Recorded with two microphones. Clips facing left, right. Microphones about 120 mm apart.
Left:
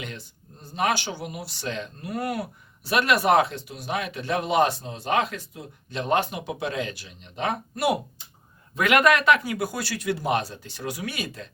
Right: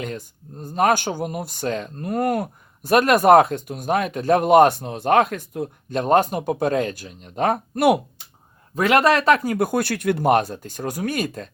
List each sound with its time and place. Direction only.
0.0 s speech: 45° right (ahead or behind)
8.7 s speech: 35° right (ahead or behind)